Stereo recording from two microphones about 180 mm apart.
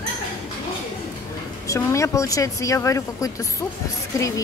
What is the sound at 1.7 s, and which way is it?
Speech, 15° left (ahead or behind).